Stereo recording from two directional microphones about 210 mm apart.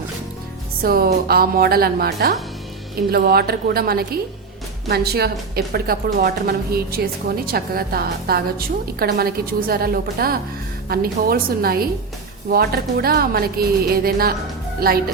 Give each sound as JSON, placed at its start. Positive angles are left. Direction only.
{"t": 0.8, "sound": "a woman's voice", "side_deg": -45}